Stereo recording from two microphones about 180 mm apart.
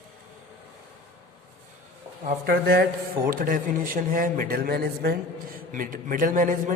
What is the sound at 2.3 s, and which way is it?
A man's voice, 55° right (ahead or behind).